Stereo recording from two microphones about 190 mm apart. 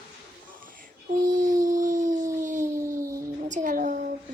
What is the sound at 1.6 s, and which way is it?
Dog, 40° right (ahead or behind).